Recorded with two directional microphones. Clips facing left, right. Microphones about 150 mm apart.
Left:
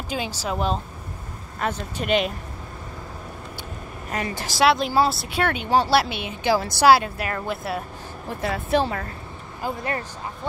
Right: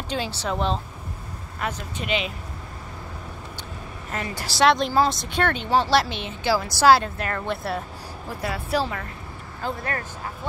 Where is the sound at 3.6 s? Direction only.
15° left (ahead or behind).